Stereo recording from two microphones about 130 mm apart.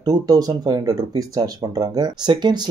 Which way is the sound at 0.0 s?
30° right (ahead or behind).